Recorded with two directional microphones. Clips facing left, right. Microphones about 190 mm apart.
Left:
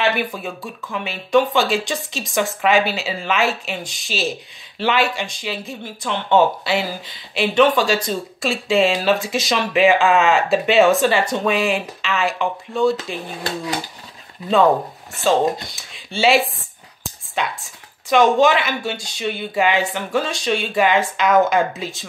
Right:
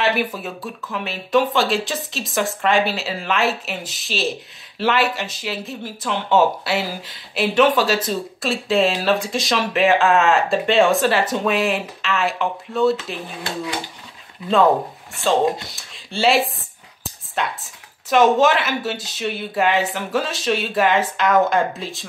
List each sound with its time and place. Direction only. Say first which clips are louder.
0.0 s speech: even; 5° right (ahead or behind)
12.9 s speech: left 1 dB; 40° left (ahead or behind)
15.2 s speech: left 1 dB; centre (ahead or behind)